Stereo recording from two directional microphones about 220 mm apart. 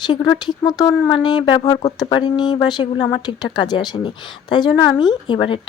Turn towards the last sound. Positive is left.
turn(degrees=20)  # may be behind; listen again after turning